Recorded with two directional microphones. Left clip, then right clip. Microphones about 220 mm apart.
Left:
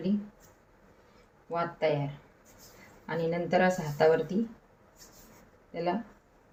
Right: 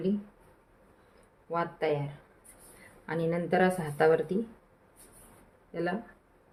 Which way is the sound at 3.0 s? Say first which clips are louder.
Even; 30° right (ahead or behind).